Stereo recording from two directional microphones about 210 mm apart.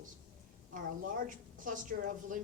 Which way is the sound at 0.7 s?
40° right (ahead or behind).